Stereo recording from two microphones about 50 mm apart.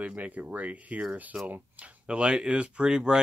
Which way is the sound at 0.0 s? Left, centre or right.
Right.